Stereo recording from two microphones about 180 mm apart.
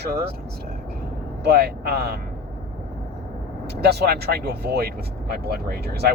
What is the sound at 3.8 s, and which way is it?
Speech, 65° right (ahead or behind).